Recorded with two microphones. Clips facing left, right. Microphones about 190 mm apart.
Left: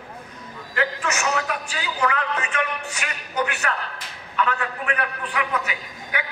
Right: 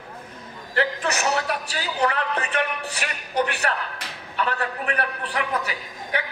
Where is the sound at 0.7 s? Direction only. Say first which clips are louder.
Right 1 dB; 35° right (ahead or behind).